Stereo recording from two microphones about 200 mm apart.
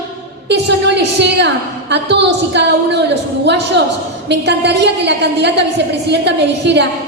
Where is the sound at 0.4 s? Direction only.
60° right (ahead or behind).